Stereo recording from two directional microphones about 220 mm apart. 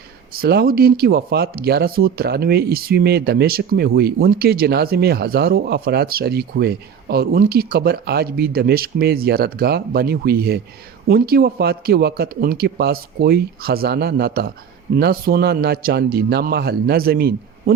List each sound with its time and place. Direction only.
0.3 s speech: 45° right (ahead or behind)